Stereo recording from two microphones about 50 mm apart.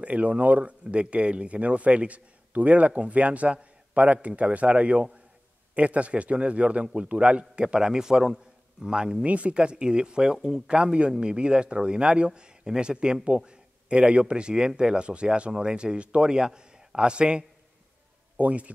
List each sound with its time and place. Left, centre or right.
0.0 s a man's voice: right
9.2 s a man's voice: right